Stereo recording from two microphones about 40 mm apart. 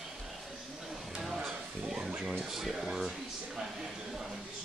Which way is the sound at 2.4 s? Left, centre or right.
Centre.